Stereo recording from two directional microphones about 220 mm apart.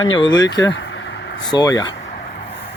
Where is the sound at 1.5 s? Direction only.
15° left (ahead or behind).